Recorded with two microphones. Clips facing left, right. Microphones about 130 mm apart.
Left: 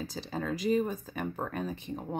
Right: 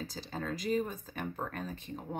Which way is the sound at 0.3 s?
10° left (ahead or behind).